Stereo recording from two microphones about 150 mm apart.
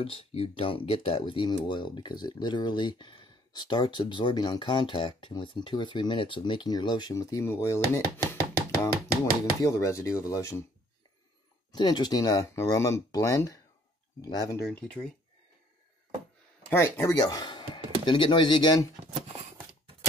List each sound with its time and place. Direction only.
0.0 s speech: 35° left (ahead or behind); by 10.6 s 20° left (ahead or behind)
11.7 s speech: 30° left (ahead or behind)
14.7 s speech: 10° left (ahead or behind)
16.7 s speech: 20° left (ahead or behind)